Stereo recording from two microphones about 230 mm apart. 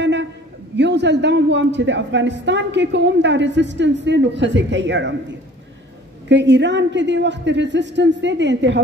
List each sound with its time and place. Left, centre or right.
0.0 s a sound: right
0.7 s a woman's voice: right
6.2 s a woman's voice: right